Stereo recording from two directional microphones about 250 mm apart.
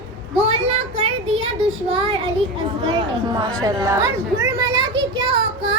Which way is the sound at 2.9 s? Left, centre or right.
Centre.